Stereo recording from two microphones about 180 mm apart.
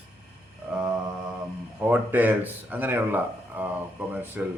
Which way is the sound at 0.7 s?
5° right (ahead or behind).